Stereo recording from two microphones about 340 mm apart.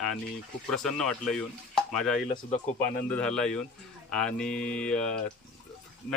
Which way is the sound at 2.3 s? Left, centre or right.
Centre.